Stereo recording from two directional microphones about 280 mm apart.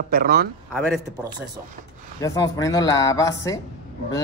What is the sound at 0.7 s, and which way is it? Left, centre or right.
Speech, centre.